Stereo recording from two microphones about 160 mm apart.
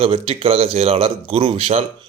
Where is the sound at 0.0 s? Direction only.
35° right (ahead or behind).